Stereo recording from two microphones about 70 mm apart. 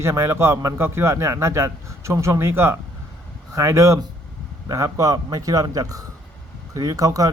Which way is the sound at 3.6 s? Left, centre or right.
Right.